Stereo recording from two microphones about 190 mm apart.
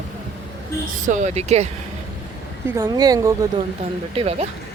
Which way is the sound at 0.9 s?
40° right (ahead or behind).